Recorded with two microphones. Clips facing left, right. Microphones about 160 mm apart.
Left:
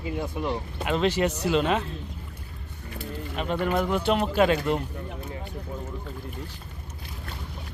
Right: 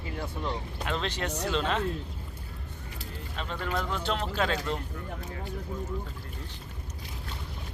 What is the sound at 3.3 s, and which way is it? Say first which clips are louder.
Speech: left 7 dB; 15° left (ahead or behind).